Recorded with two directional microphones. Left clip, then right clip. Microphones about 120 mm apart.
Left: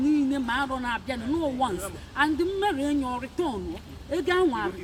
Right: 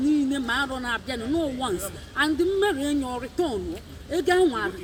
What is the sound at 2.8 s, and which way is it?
Speech, 20° left (ahead or behind).